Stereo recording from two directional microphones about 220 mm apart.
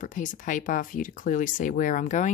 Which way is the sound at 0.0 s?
35° left (ahead or behind).